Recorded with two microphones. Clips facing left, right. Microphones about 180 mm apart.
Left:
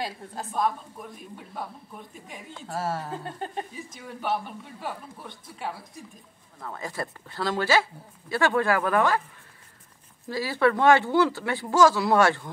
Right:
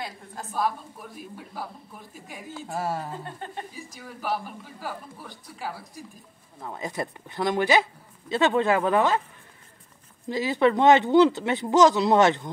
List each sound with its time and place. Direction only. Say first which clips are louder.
0.5 s a man's voice: even; 5° right (ahead or behind)
2.7 s speech: even; 15° right (ahead or behind)
3.7 s a man's voice: left 2 dB; centre (ahead or behind)
6.6 s speech: right 2 dB; 20° right (ahead or behind)
10.2 s speech: right 2 dB; 20° right (ahead or behind)